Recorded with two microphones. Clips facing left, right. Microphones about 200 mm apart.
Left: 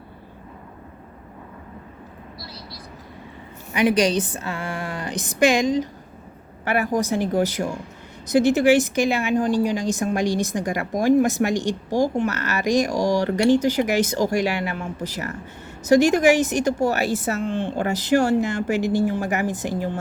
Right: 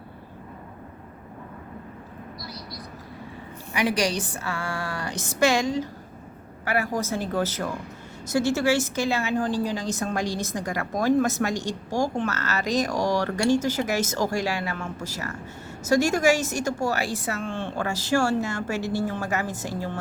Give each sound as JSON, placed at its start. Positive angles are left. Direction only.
{"t": 3.7, "sound": "speech", "side_deg": 20}